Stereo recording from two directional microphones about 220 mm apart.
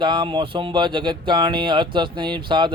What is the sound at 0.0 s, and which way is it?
Speech, 20° right (ahead or behind).